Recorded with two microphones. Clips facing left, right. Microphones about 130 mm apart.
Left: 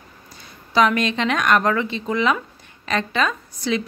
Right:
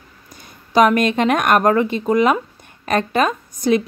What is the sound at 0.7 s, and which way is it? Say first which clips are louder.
Speech: right 4 dB; 50° right (ahead or behind).